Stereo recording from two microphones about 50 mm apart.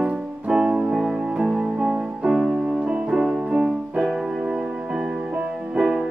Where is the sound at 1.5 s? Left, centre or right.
Right.